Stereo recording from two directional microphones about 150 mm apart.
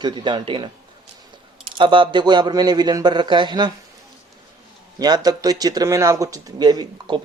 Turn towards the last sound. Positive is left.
turn(degrees=-30)  # may be behind; listen again after turning